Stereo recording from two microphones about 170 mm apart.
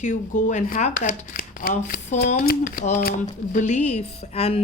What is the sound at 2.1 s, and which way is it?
A woman's voice, 60° left (ahead or behind).